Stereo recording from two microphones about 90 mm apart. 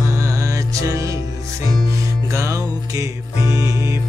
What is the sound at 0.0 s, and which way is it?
Music, 35° right (ahead or behind).